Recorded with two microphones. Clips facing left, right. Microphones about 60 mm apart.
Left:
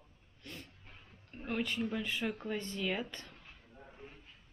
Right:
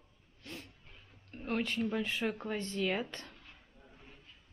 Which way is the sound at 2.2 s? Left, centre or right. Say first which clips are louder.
Right 2 dB; centre.